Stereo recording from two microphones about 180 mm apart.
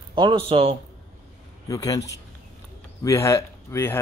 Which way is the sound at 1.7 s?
20° left (ahead or behind).